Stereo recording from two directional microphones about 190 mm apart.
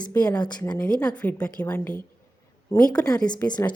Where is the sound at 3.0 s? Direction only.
20° left (ahead or behind).